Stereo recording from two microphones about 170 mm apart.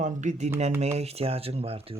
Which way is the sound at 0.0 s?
45° right (ahead or behind).